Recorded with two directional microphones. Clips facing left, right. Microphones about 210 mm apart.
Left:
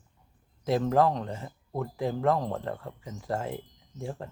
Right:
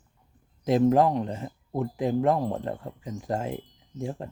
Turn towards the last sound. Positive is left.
turn(degrees=-20)  # may be behind; listen again after turning